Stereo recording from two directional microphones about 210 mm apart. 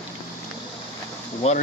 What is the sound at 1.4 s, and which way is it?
Speech, 30° left (ahead or behind).